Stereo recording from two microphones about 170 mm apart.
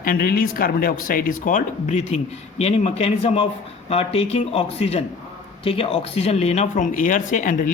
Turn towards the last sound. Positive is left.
turn(degrees=50)  # may be behind; listen again after turning